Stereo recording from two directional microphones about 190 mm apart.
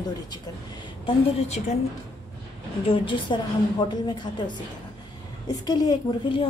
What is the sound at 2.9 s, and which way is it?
A woman's voice, 25° left (ahead or behind).